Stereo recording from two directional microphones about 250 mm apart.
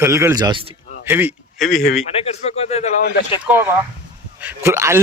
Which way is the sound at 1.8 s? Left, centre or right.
Left.